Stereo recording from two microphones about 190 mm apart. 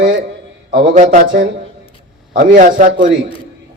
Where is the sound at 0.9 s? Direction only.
40° right (ahead or behind).